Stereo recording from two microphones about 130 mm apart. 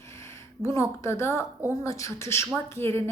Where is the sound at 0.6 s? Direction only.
20° left (ahead or behind).